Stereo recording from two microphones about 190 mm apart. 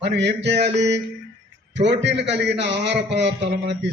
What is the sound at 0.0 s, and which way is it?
A man's voice, 65° right (ahead or behind).